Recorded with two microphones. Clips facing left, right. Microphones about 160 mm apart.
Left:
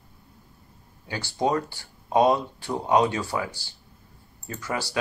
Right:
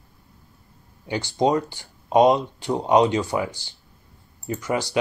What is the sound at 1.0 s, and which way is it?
Speech, 20° right (ahead or behind).